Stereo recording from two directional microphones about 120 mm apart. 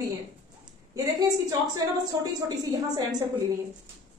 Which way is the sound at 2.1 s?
30° right (ahead or behind).